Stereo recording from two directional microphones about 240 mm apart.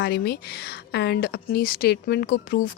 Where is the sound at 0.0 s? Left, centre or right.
Left.